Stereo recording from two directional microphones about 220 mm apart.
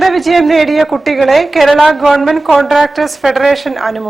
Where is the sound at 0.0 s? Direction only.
Centre (ahead or behind).